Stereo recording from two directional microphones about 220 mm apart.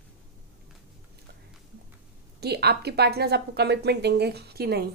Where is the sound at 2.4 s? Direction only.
45° right (ahead or behind).